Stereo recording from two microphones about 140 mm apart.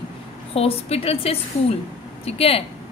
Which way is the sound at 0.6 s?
45° left (ahead or behind).